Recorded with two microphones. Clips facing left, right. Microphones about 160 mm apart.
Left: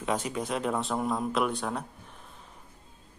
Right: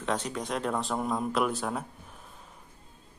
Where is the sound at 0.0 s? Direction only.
10° left (ahead or behind).